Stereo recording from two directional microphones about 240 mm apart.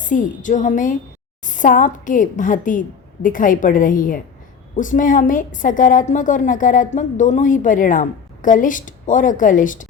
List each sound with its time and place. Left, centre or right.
0.0 s a woman's voice: left